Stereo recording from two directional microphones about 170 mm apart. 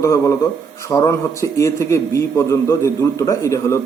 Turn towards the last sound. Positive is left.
turn(degrees=15)  # may be behind; listen again after turning